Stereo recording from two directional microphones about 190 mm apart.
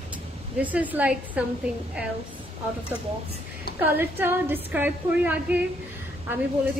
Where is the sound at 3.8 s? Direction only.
10° right (ahead or behind).